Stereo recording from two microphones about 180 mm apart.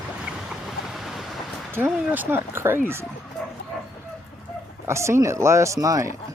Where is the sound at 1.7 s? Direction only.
10° right (ahead or behind).